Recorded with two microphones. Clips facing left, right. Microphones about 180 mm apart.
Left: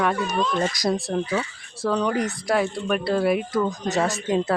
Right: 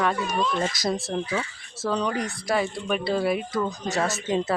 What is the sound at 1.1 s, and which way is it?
Speech, centre (ahead or behind).